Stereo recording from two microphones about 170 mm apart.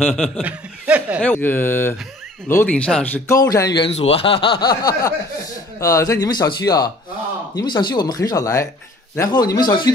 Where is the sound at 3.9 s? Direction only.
35° left (ahead or behind).